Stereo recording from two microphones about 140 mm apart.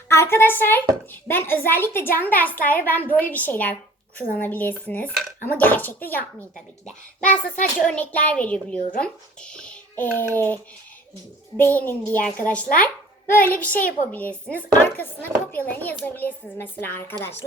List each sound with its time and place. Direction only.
0.1 s speech: 20° left (ahead or behind)
7.3 s speech: 5° left (ahead or behind)